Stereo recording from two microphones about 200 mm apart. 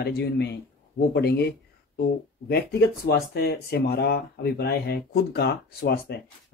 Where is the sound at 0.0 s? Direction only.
55° left (ahead or behind).